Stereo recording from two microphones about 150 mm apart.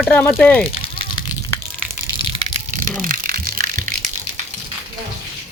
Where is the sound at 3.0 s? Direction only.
70° right (ahead or behind).